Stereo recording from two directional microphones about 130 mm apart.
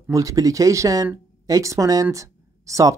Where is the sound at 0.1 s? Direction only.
25° right (ahead or behind).